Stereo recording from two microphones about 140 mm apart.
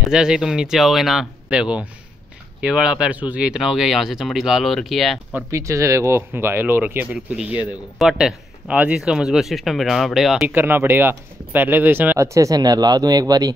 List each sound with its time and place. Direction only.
0.1 s speech: 5° right (ahead or behind)
5.3 s speech: 20° right (ahead or behind); by 10.5 s centre (ahead or behind)
10.5 s speech: 15° right (ahead or behind)